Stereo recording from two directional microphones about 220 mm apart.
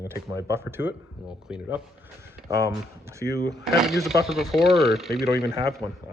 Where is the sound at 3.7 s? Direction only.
Centre (ahead or behind).